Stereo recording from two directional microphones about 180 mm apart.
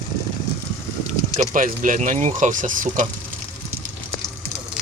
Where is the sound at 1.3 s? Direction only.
45° right (ahead or behind).